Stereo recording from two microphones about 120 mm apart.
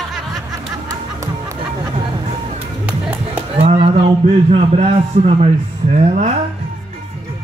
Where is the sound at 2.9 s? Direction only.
10° right (ahead or behind).